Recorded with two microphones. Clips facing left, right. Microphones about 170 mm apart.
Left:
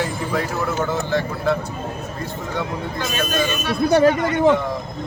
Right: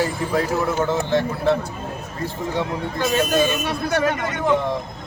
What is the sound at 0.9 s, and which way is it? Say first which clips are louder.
Speech: right 2 dB; 25° right (ahead or behind).